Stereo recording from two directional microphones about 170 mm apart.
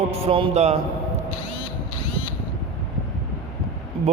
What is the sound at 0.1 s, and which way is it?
Speech, 35° right (ahead or behind).